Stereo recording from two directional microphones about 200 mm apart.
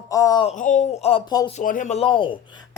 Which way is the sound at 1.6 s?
40° left (ahead or behind).